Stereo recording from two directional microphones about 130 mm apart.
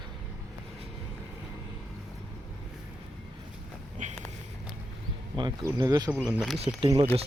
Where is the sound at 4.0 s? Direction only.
75° right (ahead or behind).